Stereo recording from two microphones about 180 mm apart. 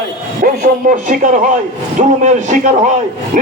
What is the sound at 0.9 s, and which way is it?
A man's voice, 50° right (ahead or behind).